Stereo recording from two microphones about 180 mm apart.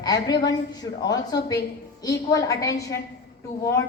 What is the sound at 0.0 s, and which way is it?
A woman's voice, 20° left (ahead or behind).